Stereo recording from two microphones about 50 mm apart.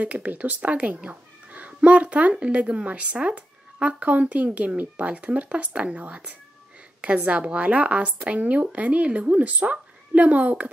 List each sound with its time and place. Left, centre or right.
0.0 s speech: right